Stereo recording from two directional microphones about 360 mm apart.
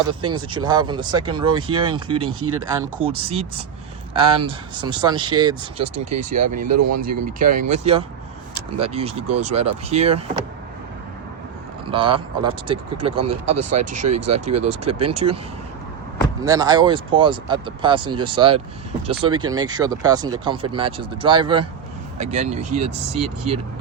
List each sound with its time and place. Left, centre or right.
0.1 s speech: centre
6.7 s speech: right
7.0 s speech: right
11.9 s speech: centre
13.6 s speech: right
14.4 s speech: centre
16.4 s speech: centre